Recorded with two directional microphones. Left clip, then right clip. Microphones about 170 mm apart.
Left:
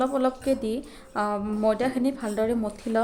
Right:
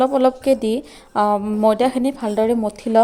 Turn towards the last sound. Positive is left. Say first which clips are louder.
# right 10 dB
turn(degrees=-35)  # may be behind; listen again after turning